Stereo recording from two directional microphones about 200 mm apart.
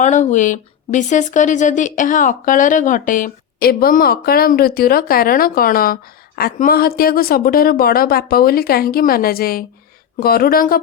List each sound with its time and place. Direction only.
0.0 s speech: 40° left (ahead or behind)